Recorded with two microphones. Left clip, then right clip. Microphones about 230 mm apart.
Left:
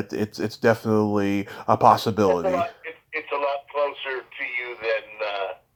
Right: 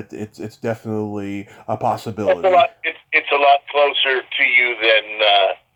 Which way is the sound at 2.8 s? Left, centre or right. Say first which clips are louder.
Right 13 dB; right.